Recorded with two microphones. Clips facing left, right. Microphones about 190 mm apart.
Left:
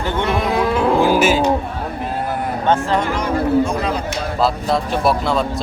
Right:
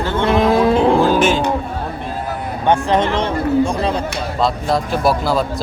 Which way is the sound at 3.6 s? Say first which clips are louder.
Right 2 dB; 30° right (ahead or behind).